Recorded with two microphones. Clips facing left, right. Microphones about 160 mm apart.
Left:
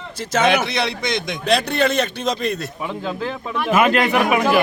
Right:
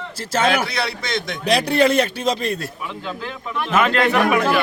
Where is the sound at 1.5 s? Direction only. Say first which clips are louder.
Right 2 dB; 10° right (ahead or behind).